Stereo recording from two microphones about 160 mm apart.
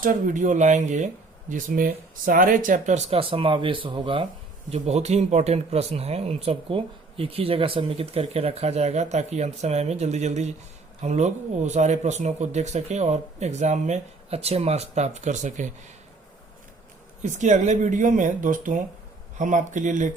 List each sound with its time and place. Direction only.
0.0 s speech: 55° right (ahead or behind); by 4.3 s 30° right (ahead or behind)
4.7 s speech: 45° right (ahead or behind)
17.2 s speech: 50° right (ahead or behind)